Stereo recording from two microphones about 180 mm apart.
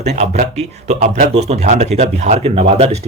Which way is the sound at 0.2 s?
40° right (ahead or behind).